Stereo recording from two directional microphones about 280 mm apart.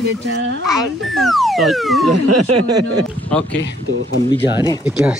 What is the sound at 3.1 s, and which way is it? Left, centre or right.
Speech, centre.